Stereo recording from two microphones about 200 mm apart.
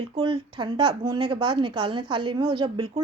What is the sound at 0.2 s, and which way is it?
A woman's voice, 25° right (ahead or behind).